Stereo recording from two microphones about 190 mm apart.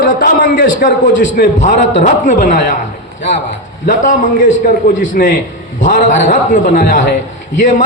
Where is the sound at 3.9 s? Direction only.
40° left (ahead or behind).